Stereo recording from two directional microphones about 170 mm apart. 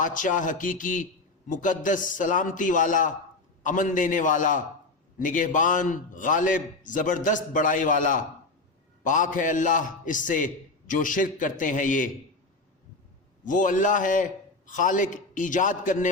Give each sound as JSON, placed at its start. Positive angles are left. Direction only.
{"t": 0.0, "sound": "a man's voice", "side_deg": 50}
{"t": 13.4, "sound": "a man's voice", "side_deg": 50}